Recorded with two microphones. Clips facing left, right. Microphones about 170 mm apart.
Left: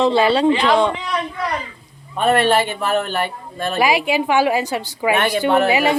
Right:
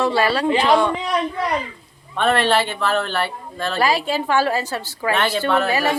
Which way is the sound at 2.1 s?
10° left (ahead or behind).